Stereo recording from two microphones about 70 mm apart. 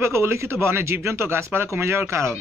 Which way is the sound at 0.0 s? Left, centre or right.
Right.